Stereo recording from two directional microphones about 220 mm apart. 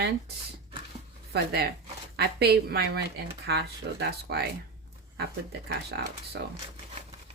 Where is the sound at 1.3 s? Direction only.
45° right (ahead or behind).